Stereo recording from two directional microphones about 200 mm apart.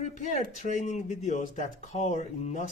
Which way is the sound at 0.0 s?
35° left (ahead or behind).